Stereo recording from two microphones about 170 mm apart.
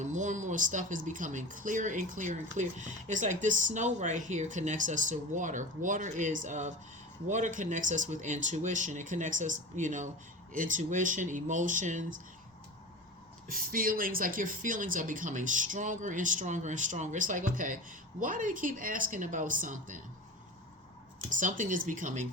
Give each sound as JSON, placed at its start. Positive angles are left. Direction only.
{"t": 0.0, "sound": "speech", "side_deg": -45}
{"t": 13.5, "sound": "speech", "side_deg": -55}
{"t": 21.2, "sound": "speech", "side_deg": -50}